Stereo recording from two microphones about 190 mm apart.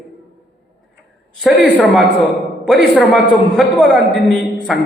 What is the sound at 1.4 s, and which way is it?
A man's voice, 5° left (ahead or behind).